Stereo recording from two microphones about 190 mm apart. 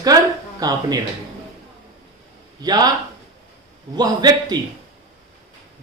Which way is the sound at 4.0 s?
20° right (ahead or behind).